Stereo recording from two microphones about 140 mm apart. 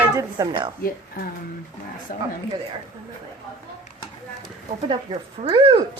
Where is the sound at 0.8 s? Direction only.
90° left.